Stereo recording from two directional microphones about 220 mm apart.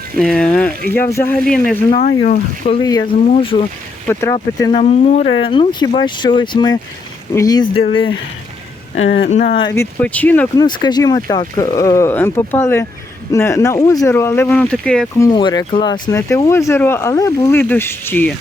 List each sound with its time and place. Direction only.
0.2 s speech: 5° left (ahead or behind)
2.0 s speech: 40° left (ahead or behind)
2.8 s speech: 15° left (ahead or behind)
4.1 s speech: 10° left (ahead or behind)
4.4 s speech: 25° left (ahead or behind)
9.0 s speech: 55° left (ahead or behind)
9.3 s speech: 40° left (ahead or behind)
9.6 s speech: 15° left (ahead or behind)
10.6 s speech: 20° left (ahead or behind)
15.3 s speech: 20° left (ahead or behind)